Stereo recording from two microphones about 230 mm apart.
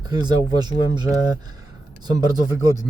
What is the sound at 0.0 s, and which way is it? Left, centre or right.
Speech, centre.